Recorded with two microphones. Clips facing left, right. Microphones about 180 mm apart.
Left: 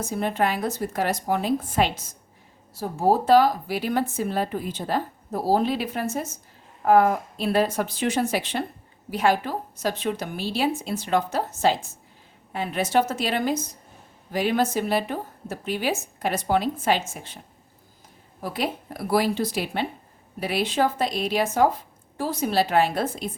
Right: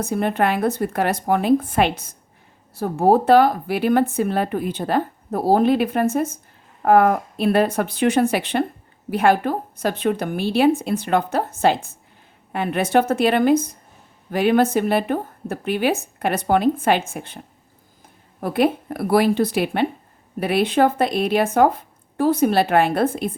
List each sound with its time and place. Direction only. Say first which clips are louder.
0.0 s speech: right 4 dB; 60° right (ahead or behind)